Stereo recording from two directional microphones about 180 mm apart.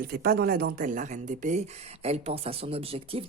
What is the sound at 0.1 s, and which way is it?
Speech, 60° right (ahead or behind).